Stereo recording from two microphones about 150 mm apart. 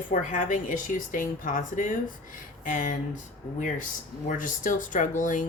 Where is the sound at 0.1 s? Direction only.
60° left (ahead or behind).